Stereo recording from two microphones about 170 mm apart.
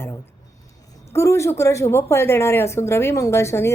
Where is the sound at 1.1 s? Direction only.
15° left (ahead or behind).